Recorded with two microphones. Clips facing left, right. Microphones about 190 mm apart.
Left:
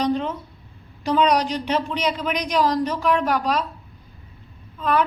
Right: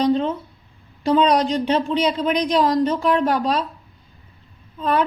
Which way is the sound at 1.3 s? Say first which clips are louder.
Right 3 dB; 30° right (ahead or behind).